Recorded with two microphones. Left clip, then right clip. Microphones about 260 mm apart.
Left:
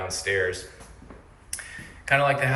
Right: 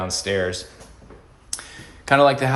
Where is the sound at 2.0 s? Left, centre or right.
Centre.